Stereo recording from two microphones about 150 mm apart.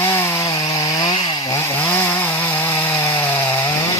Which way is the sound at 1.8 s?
15° left (ahead or behind).